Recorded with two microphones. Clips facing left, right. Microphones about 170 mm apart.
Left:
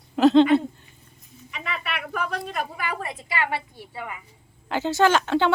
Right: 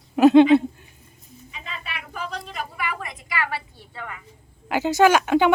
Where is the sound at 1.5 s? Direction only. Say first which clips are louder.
Left 5 dB; 70° left (ahead or behind); by 2.9 s 50° left (ahead or behind).